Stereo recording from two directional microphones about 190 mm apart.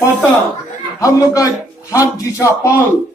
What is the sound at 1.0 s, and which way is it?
A man's voice, 20° left (ahead or behind).